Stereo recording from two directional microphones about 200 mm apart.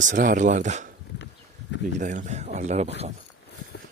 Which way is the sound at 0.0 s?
40° right (ahead or behind).